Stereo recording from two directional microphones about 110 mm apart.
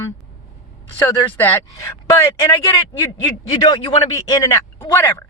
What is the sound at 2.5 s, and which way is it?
Speech, 30° left (ahead or behind).